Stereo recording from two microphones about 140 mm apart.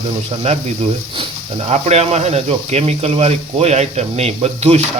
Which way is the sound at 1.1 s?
40° right (ahead or behind).